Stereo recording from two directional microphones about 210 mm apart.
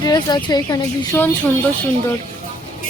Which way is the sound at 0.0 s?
20° left (ahead or behind).